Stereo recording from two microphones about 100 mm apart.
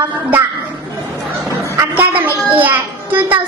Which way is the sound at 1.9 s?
15° right (ahead or behind).